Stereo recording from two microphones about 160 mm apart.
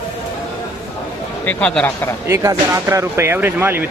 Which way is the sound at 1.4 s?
10° left (ahead or behind).